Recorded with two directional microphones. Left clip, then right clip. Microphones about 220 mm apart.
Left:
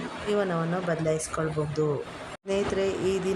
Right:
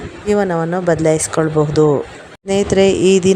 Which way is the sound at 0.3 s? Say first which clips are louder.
Right 12 dB; 30° right (ahead or behind).